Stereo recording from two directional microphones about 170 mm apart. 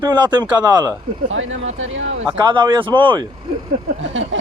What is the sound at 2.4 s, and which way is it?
Speech, 30° right (ahead or behind).